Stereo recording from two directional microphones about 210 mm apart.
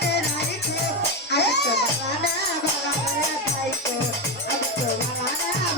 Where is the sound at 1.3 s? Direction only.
55° left (ahead or behind).